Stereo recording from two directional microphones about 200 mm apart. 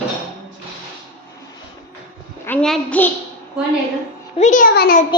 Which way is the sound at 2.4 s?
5° left (ahead or behind).